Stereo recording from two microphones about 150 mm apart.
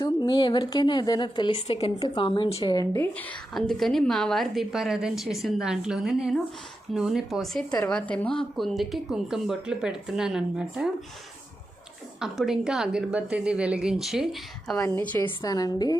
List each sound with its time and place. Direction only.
0.0 s a woman's voice: 30° left (ahead or behind)
3.0 s a woman's voice: 10° left (ahead or behind)
12.2 s a woman's voice: 5° right (ahead or behind)
14.8 s a woman's voice: 15° left (ahead or behind)
15.4 s a woman's voice: 25° left (ahead or behind)